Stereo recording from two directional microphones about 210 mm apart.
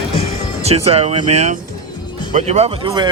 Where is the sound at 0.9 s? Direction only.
30° right (ahead or behind).